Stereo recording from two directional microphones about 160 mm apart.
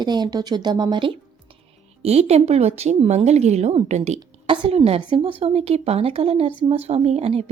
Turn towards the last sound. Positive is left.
turn(degrees=-40)  # may be behind; listen again after turning